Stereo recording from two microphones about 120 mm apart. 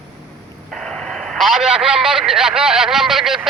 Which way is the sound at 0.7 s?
5° left (ahead or behind).